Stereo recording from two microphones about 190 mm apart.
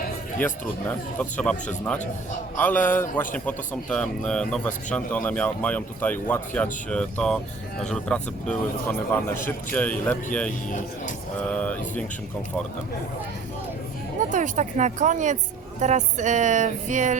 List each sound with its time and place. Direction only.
0.3 s a man's voice: 10° left (ahead or behind)
11.4 s a man's voice: 5° left (ahead or behind)
14.2 s speech: 40° right (ahead or behind)